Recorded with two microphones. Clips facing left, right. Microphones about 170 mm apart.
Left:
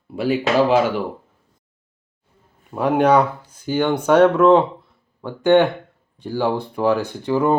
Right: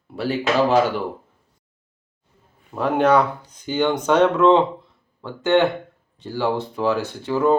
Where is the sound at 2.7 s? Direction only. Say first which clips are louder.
Left 2 dB; 10° left (ahead or behind).